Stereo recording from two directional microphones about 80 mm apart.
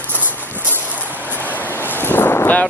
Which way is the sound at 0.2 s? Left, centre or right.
Right.